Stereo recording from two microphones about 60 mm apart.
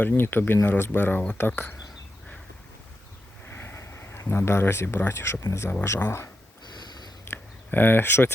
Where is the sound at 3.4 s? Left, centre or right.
Left.